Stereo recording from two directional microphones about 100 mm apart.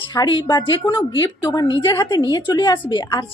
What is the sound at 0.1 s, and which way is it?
A woman's voice, 45° left (ahead or behind).